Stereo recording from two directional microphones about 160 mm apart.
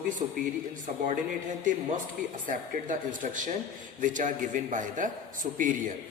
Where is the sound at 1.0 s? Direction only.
55° right (ahead or behind).